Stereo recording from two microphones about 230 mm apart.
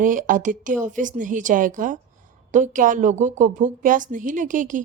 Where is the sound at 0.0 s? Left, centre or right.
Right.